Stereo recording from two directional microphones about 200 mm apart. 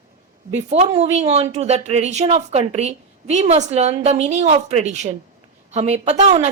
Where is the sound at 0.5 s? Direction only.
35° right (ahead or behind).